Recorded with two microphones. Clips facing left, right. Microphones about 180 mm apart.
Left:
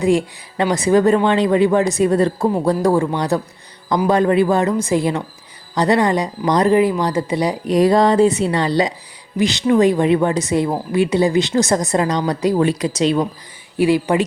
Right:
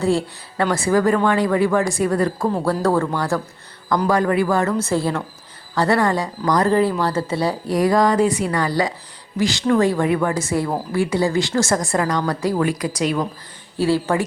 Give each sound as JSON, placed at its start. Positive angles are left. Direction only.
{"t": 0.0, "sound": "a woman's voice", "side_deg": 15}